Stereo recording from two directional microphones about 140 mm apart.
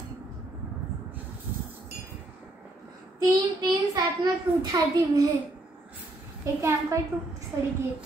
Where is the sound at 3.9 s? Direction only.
30° right (ahead or behind).